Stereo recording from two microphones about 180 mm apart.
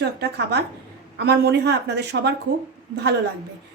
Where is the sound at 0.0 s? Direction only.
70° right (ahead or behind).